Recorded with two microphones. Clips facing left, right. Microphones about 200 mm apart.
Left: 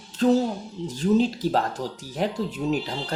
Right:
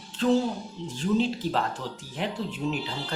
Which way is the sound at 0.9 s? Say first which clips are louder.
Left 4 dB; 40° left (ahead or behind).